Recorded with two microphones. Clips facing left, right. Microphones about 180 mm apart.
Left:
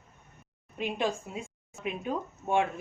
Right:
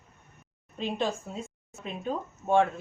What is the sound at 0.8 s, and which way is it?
A woman's voice, 10° left (ahead or behind).